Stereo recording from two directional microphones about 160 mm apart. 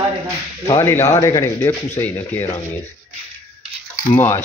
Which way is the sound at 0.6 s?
15° left (ahead or behind).